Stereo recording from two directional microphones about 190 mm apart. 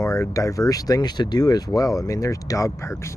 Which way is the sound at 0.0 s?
15° left (ahead or behind).